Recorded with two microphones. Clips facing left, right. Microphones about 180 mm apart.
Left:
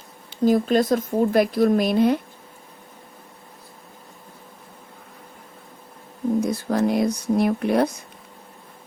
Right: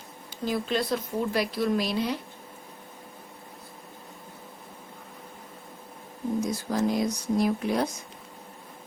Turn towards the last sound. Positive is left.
turn(degrees=60)  # may be behind; listen again after turning